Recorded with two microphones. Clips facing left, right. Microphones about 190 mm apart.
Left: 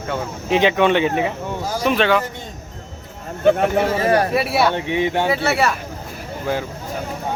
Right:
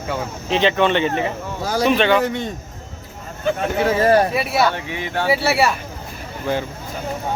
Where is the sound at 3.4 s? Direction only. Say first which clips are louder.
Left 7 dB; 60° left (ahead or behind).